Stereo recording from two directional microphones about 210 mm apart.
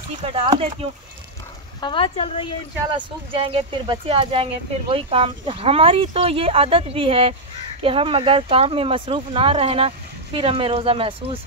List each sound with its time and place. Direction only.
0.2 s speech: 25° right (ahead or behind)
1.8 s speech: 25° left (ahead or behind)
2.9 s speech: 25° right (ahead or behind)